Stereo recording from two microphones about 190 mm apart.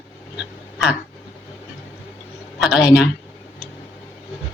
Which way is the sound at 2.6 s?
Centre (ahead or behind).